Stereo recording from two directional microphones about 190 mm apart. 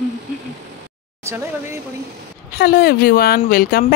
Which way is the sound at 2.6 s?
50° left (ahead or behind).